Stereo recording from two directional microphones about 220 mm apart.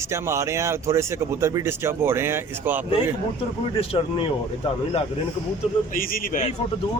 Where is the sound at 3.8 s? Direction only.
25° left (ahead or behind).